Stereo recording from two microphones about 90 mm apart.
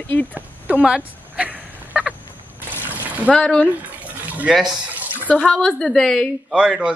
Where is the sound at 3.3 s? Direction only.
10° left (ahead or behind).